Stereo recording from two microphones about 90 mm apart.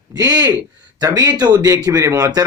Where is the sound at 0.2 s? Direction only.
45° right (ahead or behind).